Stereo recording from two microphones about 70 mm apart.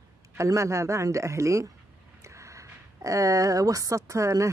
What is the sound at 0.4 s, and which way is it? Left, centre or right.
Speech, right.